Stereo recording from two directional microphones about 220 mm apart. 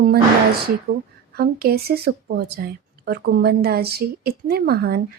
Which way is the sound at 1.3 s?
45° right (ahead or behind).